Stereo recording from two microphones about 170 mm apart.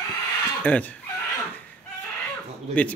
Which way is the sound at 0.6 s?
10° left (ahead or behind).